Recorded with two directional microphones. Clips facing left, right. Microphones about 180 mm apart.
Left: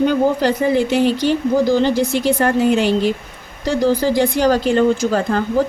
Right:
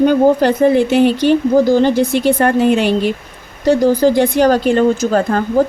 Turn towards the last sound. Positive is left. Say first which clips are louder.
# right 3 dB
turn(degrees=-50)  # may be behind; listen again after turning